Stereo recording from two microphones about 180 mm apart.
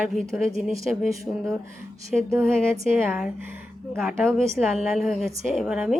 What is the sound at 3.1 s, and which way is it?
Speech, 5° right (ahead or behind).